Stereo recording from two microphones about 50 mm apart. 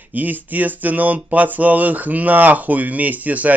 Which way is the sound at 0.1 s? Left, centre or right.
Right.